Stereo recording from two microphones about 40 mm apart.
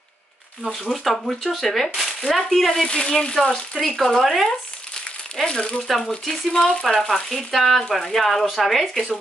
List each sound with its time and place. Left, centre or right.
0.9 s speech: centre
3.1 s speech: left
5.4 s speech: left
5.9 s speech: centre